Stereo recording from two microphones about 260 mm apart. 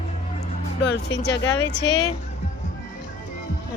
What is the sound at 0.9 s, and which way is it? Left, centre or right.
Speech, left.